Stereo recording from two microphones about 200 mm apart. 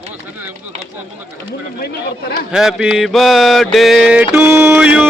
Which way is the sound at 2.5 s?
Centre (ahead or behind).